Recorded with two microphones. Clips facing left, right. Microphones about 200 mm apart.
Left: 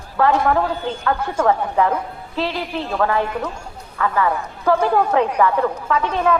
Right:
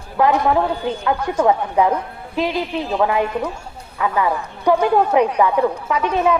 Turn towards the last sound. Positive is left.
turn(degrees=-10)  # may be behind; listen again after turning